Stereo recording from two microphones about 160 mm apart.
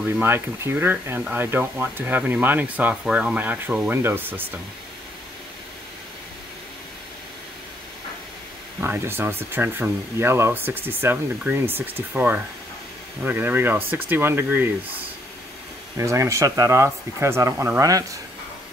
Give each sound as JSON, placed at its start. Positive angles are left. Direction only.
{"t": 0.0, "sound": "speech", "side_deg": -10}
{"t": 8.8, "sound": "speech", "side_deg": -15}
{"t": 16.0, "sound": "speech", "side_deg": -20}